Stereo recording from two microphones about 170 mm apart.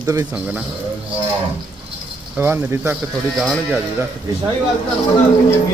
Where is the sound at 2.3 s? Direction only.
10° right (ahead or behind).